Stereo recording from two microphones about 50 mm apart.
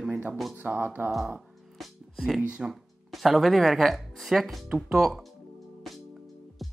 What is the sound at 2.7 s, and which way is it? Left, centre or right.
Speech, centre.